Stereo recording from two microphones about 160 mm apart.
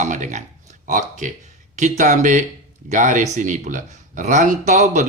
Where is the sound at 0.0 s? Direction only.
50° right (ahead or behind).